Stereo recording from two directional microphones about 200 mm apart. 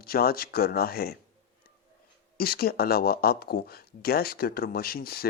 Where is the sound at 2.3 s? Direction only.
50° left (ahead or behind).